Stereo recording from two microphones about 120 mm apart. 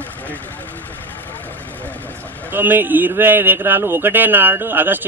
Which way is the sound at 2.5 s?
15° right (ahead or behind).